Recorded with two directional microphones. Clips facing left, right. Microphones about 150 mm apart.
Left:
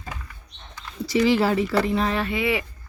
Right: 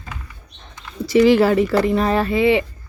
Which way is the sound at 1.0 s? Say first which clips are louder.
Right 7 dB; 60° right (ahead or behind).